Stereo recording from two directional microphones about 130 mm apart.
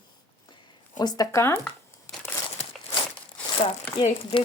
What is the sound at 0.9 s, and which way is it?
Speech, 30° left (ahead or behind).